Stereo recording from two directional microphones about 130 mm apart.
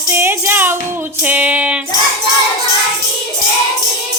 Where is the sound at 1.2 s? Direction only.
10° right (ahead or behind).